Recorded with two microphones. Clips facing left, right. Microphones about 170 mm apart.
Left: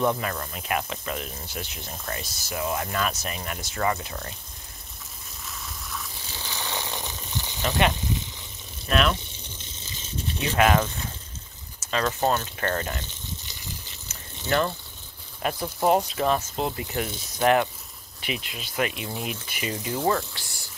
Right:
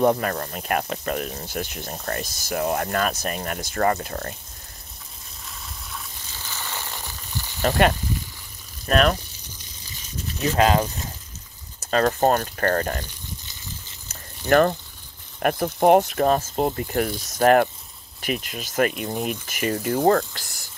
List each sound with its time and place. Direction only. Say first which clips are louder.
0.0 s speech: right 5 dB; 45° right (ahead or behind)
6.4 s frying: left 2 dB; 15° left (ahead or behind)
7.6 s speech: right 5 dB; 45° right (ahead or behind)
10.5 s speech: right 2 dB; 30° right (ahead or behind)
11.9 s speech: right 5 dB; 45° right (ahead or behind)
13.0 s boiling: right 1 dB; 20° left (ahead or behind)
14.5 s speech: right 7 dB; 55° right (ahead or behind)
16.5 s speech: right 5 dB; 45° right (ahead or behind)